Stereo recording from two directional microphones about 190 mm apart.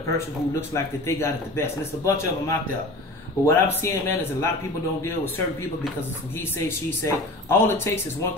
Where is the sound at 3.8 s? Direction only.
10° left (ahead or behind).